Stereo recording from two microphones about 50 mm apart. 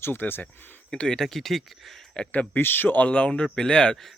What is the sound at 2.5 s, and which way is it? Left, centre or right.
Speech, left.